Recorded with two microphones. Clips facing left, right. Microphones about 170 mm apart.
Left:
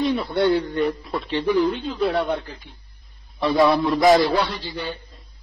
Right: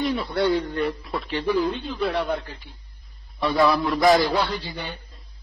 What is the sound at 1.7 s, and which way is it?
Speech, 35° left (ahead or behind).